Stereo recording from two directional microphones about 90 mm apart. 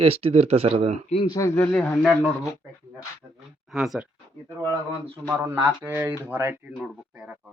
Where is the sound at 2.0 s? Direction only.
Centre (ahead or behind).